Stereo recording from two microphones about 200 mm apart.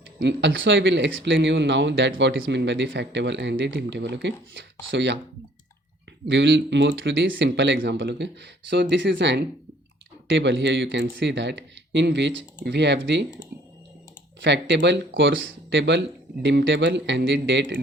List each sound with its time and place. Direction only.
0.2 s speech: 60° right (ahead or behind)
6.2 s speech: 65° right (ahead or behind)
14.4 s speech: 60° right (ahead or behind)